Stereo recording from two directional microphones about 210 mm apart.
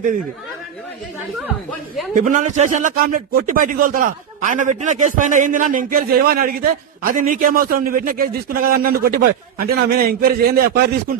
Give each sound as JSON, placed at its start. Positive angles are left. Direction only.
{"t": 2.1, "sound": "a man's voice", "side_deg": -40}